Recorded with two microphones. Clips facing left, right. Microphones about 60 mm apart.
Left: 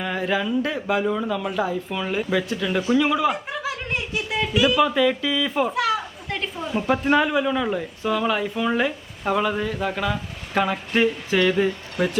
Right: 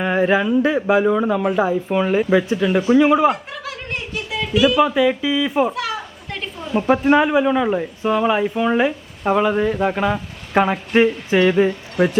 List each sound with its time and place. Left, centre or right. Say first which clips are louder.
0.0 s speech: right 7 dB; right
3.6 s chuckle: left 1 dB; centre
4.8 s speech: right 3 dB; centre
5.7 s children playing: left 2 dB; centre
6.7 s speech: right 5 dB; centre